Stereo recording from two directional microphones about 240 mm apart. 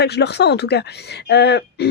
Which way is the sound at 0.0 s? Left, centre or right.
Left.